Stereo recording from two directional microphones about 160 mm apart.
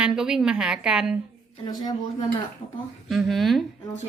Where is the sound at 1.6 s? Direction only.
25° left (ahead or behind).